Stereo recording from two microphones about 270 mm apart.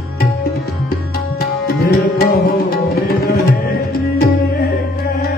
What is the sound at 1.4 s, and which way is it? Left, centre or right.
Tabla, left.